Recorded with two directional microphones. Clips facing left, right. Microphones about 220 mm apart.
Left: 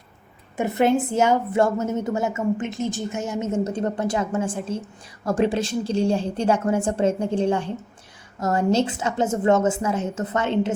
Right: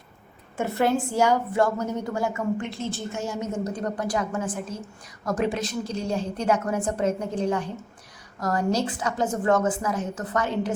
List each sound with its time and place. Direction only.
0.5 s a woman's voice: 20° left (ahead or behind)